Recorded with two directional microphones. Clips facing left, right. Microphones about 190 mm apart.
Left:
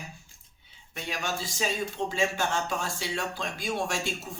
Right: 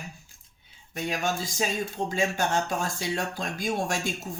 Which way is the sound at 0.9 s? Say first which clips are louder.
Right 5 dB; 45° right (ahead or behind).